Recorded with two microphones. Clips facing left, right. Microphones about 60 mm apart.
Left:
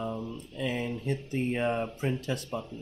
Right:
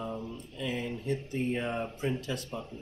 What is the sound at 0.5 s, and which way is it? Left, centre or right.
Speech, left.